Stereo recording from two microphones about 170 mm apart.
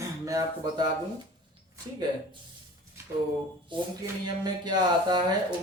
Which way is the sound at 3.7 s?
30° right (ahead or behind).